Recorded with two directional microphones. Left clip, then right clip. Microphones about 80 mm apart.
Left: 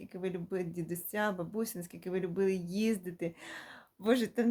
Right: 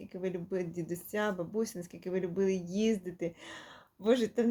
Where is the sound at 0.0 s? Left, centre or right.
Left.